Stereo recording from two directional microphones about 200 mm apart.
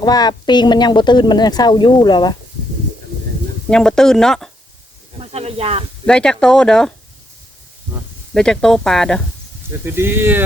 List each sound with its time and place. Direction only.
0.0 s a woman's voice: 20° left (ahead or behind)
3.7 s speech: 5° left (ahead or behind)
5.1 s speech: 30° right (ahead or behind)
6.1 s speech: 5° left (ahead or behind)
8.3 s speech: 5° left (ahead or behind)
9.8 s speech: 10° right (ahead or behind)